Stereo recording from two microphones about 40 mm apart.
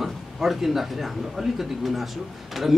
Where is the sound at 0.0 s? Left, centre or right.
Centre.